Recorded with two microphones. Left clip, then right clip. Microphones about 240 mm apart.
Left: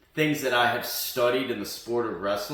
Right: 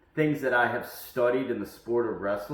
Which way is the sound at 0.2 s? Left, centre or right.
Left.